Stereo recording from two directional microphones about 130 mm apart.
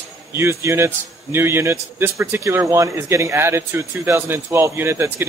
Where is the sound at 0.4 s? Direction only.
20° right (ahead or behind).